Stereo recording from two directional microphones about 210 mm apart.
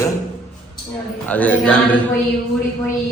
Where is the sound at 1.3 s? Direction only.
5° left (ahead or behind).